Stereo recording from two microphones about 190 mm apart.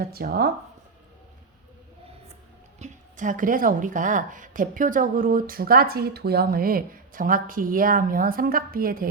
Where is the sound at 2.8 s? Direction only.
40° right (ahead or behind).